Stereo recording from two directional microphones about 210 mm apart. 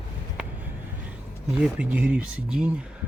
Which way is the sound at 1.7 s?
5° right (ahead or behind).